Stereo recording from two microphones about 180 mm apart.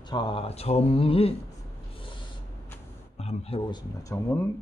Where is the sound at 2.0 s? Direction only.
30° left (ahead or behind).